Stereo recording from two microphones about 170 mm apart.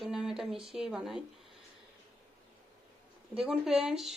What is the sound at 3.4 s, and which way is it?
Speech, 5° right (ahead or behind).